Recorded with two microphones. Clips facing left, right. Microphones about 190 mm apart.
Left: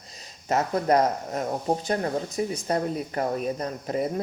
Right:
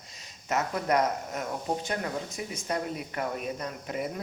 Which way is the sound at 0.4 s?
35° left (ahead or behind).